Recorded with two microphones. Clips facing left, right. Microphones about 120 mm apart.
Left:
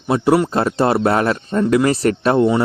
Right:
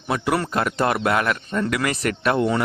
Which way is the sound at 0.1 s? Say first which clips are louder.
Left 7 dB; 30° left (ahead or behind).